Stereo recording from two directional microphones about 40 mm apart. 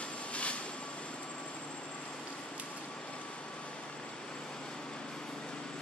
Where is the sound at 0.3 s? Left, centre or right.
Left.